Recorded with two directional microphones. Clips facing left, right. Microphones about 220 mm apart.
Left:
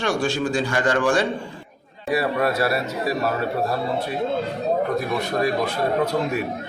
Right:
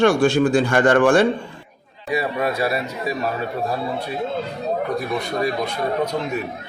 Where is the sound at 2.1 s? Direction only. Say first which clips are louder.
Left 1 dB; centre (ahead or behind).